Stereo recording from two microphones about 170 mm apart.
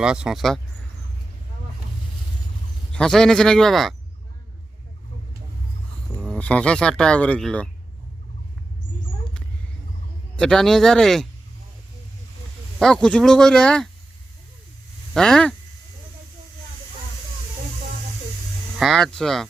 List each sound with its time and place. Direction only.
0.0 s speech: 5° right (ahead or behind)
2.9 s speech: 5° left (ahead or behind)
6.1 s speech: 5° left (ahead or behind)
10.3 s speech: 5° left (ahead or behind)
12.8 s speech: 5° left (ahead or behind)
15.1 s speech: 5° left (ahead or behind)
18.8 s speech: centre (ahead or behind)